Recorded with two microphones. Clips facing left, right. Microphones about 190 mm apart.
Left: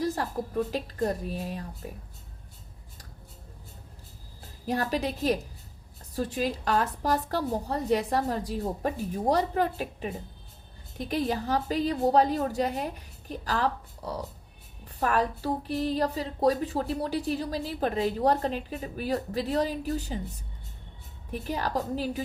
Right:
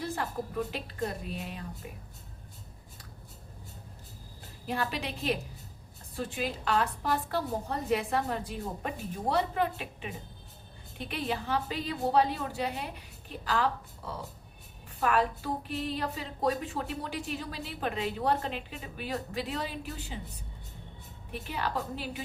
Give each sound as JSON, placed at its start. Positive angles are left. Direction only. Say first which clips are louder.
{"t": 0.4, "sound": "a woman's voice", "louder": "left 5 dB", "side_deg": 40}
{"t": 4.6, "sound": "a woman's voice", "louder": "left 5 dB", "side_deg": 40}
{"t": 21.3, "sound": "a woman's voice", "louder": "left 4 dB", "side_deg": 40}